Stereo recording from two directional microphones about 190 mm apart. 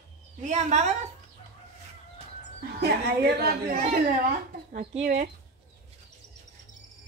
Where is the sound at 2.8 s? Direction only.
60° right (ahead or behind).